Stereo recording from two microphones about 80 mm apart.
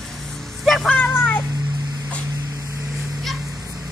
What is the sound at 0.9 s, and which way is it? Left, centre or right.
Vehicle, centre.